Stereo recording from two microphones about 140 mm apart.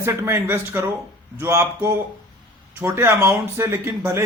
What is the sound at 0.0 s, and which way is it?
A man's voice, 20° right (ahead or behind).